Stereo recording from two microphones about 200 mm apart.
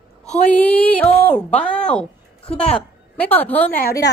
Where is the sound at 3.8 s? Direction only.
50° left (ahead or behind).